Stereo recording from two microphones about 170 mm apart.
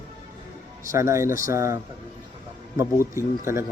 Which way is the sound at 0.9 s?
15° right (ahead or behind).